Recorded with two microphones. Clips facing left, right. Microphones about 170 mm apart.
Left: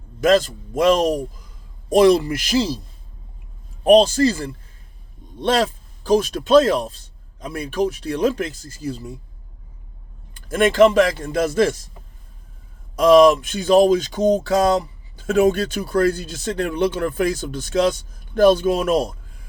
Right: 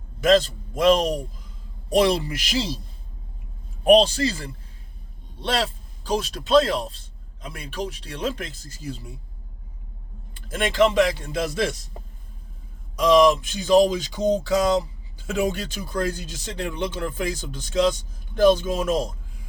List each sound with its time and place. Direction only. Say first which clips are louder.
0.2 s speech: left 2 dB; 45° left (ahead or behind)
3.8 s speech: left 3 dB; 45° left (ahead or behind)
10.5 s speech: left 6 dB; 50° left (ahead or behind)
13.0 s speech: left 5 dB; 55° left (ahead or behind)